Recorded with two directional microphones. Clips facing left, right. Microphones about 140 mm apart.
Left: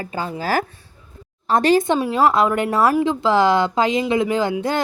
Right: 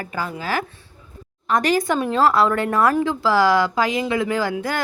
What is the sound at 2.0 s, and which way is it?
A woman's voice, 15° left (ahead or behind).